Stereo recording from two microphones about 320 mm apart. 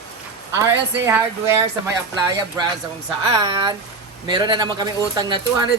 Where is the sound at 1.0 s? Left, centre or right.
Centre.